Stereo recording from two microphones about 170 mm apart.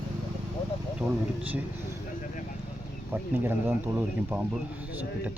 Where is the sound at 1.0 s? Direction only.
5° right (ahead or behind).